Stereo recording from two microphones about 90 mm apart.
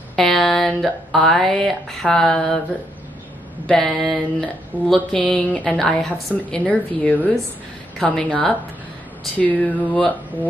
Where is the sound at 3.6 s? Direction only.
5° left (ahead or behind).